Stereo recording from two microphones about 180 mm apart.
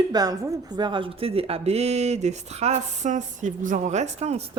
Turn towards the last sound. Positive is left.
turn(degrees=-35)  # may be behind; listen again after turning